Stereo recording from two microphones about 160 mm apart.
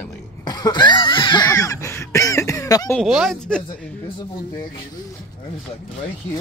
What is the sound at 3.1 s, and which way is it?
Speech, centre (ahead or behind).